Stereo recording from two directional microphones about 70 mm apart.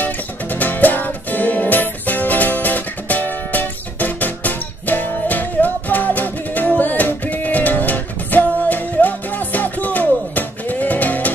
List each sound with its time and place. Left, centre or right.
0.0 s music: left